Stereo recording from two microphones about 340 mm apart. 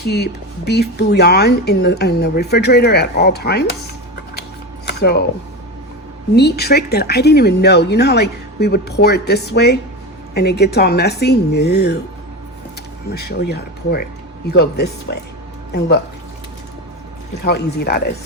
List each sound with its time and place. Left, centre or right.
0.0 s speech: left
4.9 s speech: left
6.3 s speech: left
13.1 s speech: left
17.4 s speech: left